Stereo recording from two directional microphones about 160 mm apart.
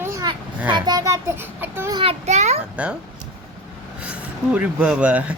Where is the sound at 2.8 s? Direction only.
5° right (ahead or behind).